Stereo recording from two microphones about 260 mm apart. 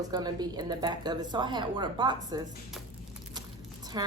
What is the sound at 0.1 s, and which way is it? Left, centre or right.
Speech, centre.